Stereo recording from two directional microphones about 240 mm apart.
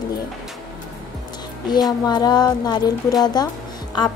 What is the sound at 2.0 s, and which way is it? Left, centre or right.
A woman's voice, centre.